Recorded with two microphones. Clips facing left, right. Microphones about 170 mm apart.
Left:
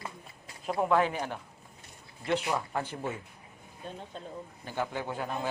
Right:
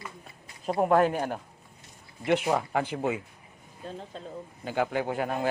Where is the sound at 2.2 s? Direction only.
60° right (ahead or behind); by 3.2 s 85° right.